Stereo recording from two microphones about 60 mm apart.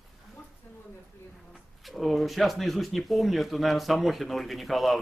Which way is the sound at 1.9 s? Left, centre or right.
Centre.